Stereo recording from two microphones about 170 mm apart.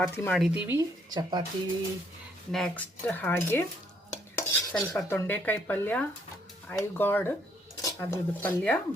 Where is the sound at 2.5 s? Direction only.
5° left (ahead or behind).